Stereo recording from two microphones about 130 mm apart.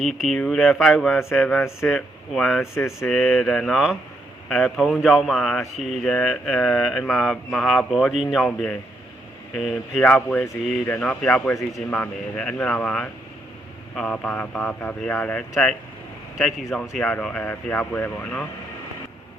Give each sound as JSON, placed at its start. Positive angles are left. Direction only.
{"t": 0.0, "sound": "a sound", "side_deg": 0}
{"t": 2.7, "sound": "speech", "side_deg": 20}
{"t": 3.1, "sound": "a sound", "side_deg": 5}
{"t": 8.4, "sound": "speech", "side_deg": 10}
{"t": 9.6, "sound": "a sound", "side_deg": 0}
{"t": 10.8, "sound": "speech", "side_deg": 15}
{"t": 11.5, "sound": "speech", "side_deg": 25}
{"t": 11.9, "sound": "speech", "side_deg": 10}
{"t": 16.9, "sound": "speech", "side_deg": 10}